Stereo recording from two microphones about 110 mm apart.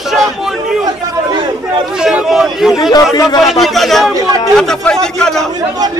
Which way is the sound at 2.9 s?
35° left (ahead or behind).